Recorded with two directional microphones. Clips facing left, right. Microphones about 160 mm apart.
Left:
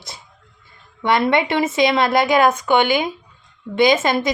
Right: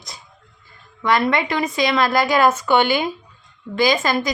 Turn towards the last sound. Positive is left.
turn(degrees=20)  # may be behind; listen again after turning